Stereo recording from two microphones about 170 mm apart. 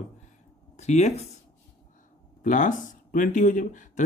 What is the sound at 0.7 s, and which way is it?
Speech, 40° left (ahead or behind).